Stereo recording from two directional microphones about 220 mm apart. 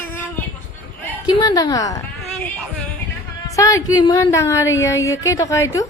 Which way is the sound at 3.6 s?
15° left (ahead or behind).